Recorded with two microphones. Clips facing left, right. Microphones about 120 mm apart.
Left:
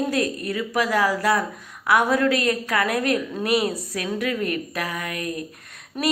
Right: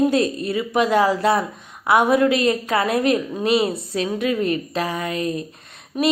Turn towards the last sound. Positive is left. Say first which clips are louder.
# right 5 dB
turn(degrees=-10)  # may be behind; listen again after turning